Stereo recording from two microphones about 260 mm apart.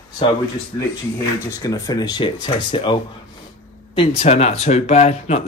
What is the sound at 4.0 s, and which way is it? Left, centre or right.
Speech, left.